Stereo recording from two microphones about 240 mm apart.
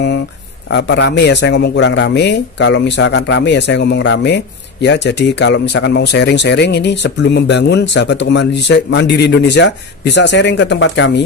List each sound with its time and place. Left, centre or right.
0.7 s speech: left